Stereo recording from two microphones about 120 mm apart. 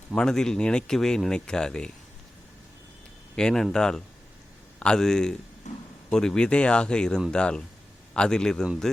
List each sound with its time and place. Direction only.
0.1 s speech: 5° left (ahead or behind)
3.3 s speech: 5° left (ahead or behind)
5.7 s a sound: 80° left
6.1 s speech: 5° left (ahead or behind)
8.6 s speech: 5° right (ahead or behind)